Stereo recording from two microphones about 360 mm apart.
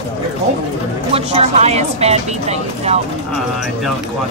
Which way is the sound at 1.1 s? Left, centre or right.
Centre.